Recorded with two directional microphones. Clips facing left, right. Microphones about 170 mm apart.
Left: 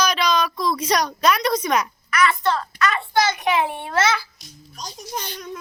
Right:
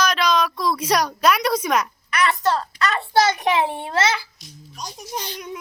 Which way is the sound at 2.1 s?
35° right (ahead or behind).